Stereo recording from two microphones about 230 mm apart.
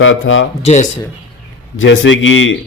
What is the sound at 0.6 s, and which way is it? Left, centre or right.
Speech, left.